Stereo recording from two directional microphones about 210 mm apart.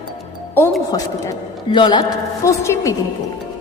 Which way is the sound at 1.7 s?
20° left (ahead or behind).